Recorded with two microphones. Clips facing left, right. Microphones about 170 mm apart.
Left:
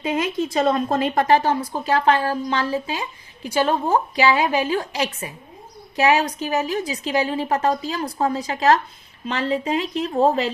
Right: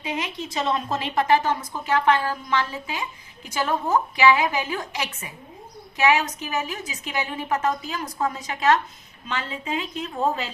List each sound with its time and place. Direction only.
0.0 s a woman's voice: 50° left (ahead or behind)